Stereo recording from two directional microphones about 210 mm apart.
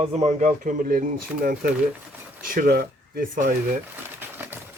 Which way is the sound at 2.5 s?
45° right (ahead or behind).